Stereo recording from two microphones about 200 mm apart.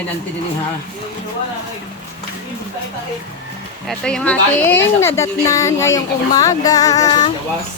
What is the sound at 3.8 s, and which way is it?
Speech, 5° left (ahead or behind).